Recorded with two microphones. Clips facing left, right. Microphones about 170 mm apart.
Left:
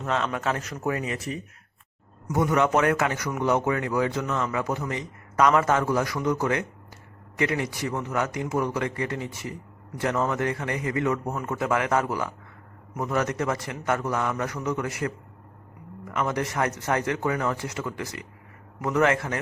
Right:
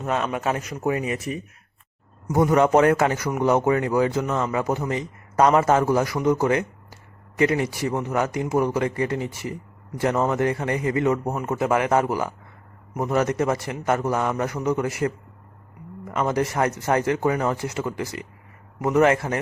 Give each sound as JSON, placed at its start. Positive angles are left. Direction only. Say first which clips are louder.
{"t": 0.0, "sound": "a man's voice", "louder": "right 2 dB", "side_deg": -15}
{"t": 2.2, "sound": "a man's voice", "louder": "right 4 dB", "side_deg": -35}